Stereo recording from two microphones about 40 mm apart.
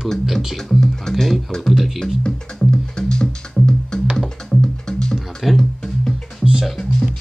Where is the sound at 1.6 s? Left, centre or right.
Centre.